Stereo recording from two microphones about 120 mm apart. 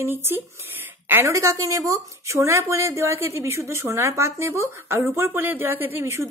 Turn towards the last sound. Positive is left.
turn(degrees=-20)  # may be behind; listen again after turning